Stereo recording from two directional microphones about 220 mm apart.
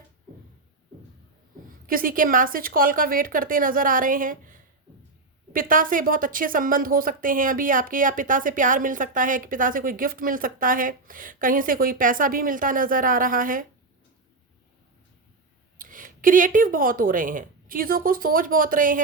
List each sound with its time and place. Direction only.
1.9 s speech: 40° right (ahead or behind)
15.8 s speech: 40° right (ahead or behind)